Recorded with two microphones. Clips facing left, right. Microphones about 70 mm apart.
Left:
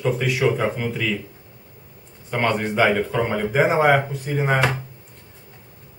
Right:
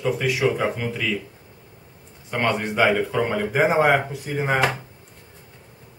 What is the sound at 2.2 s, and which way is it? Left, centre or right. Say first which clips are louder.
A man's voice: left 1 dB; centre.